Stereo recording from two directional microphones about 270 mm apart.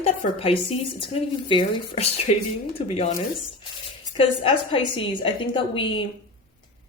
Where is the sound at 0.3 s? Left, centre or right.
Left.